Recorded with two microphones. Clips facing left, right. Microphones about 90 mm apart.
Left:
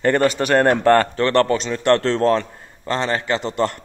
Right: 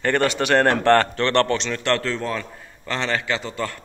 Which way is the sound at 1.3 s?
30° left (ahead or behind).